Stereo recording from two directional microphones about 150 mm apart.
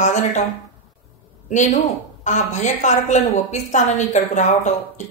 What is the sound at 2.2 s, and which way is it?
A woman's voice, 55° left (ahead or behind).